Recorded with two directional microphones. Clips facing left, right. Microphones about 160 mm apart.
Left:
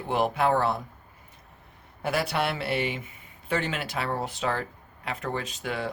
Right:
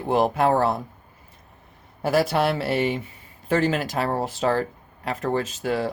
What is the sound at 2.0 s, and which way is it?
Speech, 40° right (ahead or behind).